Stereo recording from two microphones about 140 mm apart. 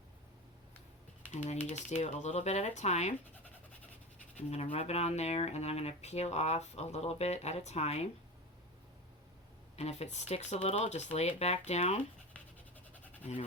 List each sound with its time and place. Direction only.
1.3 s speech: 55° left (ahead or behind)
4.5 s speech: 45° left (ahead or behind)
9.7 s speech: 50° left (ahead or behind)